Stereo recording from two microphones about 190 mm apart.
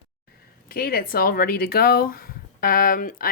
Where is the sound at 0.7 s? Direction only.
50° left (ahead or behind).